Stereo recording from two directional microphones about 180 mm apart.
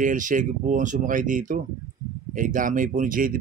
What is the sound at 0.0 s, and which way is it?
Speech, 45° right (ahead or behind).